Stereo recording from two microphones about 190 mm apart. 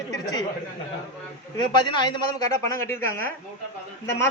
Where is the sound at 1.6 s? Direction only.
25° left (ahead or behind).